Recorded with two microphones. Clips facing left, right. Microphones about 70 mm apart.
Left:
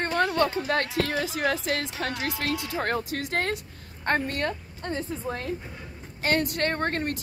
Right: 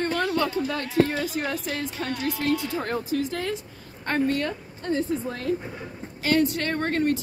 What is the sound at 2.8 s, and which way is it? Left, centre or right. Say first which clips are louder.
Speech: right 2 dB; left.